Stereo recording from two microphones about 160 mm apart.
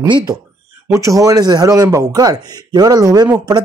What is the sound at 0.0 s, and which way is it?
Speech, 25° right (ahead or behind).